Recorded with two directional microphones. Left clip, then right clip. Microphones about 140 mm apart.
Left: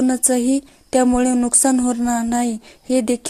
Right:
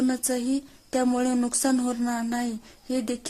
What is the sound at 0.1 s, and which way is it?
A woman's voice, 30° left (ahead or behind).